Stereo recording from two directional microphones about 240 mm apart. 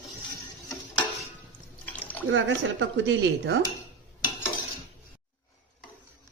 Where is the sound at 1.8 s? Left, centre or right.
Centre.